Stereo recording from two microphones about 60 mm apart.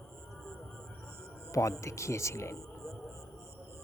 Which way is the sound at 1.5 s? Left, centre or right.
Left.